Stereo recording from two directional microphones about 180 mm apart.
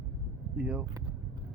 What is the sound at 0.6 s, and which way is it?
Speech, 5° right (ahead or behind).